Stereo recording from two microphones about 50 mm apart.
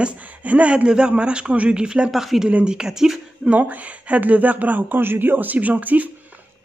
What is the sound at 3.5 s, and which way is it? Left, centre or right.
Speech, right.